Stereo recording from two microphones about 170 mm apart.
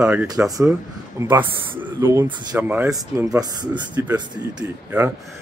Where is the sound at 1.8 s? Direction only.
10° right (ahead or behind).